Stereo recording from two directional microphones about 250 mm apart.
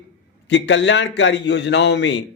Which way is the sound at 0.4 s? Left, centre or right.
Left.